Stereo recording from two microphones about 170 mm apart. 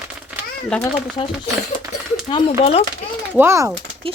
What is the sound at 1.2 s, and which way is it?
Speech, 35° left (ahead or behind).